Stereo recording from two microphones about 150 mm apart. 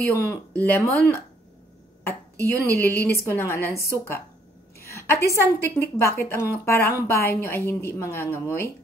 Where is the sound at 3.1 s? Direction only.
15° left (ahead or behind).